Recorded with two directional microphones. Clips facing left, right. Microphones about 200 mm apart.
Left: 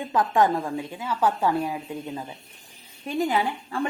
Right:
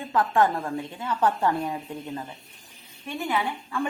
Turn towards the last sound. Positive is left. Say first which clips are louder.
# left 2 dB
turn(degrees=35)  # may be behind; listen again after turning